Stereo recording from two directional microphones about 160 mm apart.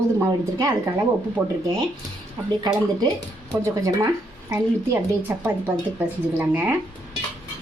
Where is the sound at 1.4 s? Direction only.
25° right (ahead or behind).